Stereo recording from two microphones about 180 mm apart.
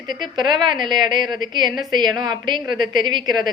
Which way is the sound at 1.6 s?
Centre (ahead or behind).